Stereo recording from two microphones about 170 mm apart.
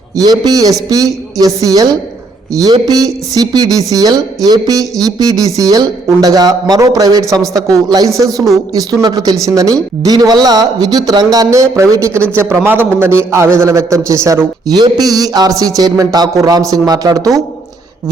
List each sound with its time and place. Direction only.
0.2 s a man's voice: 20° right (ahead or behind)